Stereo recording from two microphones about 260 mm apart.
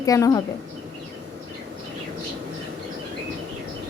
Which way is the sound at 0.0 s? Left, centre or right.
Centre.